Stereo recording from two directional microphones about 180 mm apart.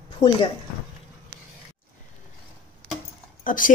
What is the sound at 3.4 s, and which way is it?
Speech, 50° left (ahead or behind).